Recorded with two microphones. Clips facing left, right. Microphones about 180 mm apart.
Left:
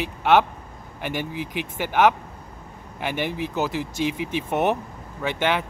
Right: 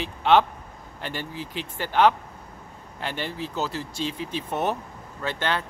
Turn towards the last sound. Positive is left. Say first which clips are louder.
# left 4 dB
turn(degrees=15)  # may be behind; listen again after turning